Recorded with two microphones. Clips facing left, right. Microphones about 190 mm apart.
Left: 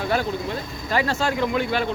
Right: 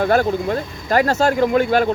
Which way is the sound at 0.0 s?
50° right (ahead or behind).